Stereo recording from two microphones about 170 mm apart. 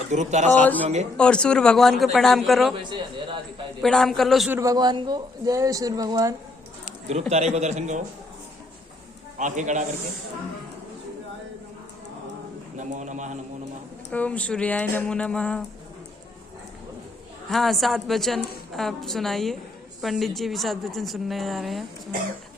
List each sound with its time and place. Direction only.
0.1 s a man's voice: 45° right (ahead or behind)
0.6 s a woman's voice: 10° left (ahead or behind)
2.7 s a man's voice: 30° right (ahead or behind)
3.8 s a woman's voice: centre (ahead or behind)
4.5 s a man's voice: 20° right (ahead or behind)
7.1 s a man's voice: 40° right (ahead or behind)
9.4 s a man's voice: 45° right (ahead or behind)
12.7 s a man's voice: 45° right (ahead or behind)
14.1 s speech: 10° left (ahead or behind)
17.5 s a woman's voice: centre (ahead or behind)